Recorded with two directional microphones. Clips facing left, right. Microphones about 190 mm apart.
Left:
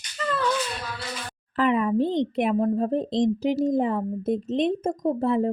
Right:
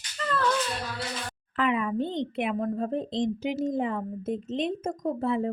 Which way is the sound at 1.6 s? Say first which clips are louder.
Left 5 dB; 35° left (ahead or behind).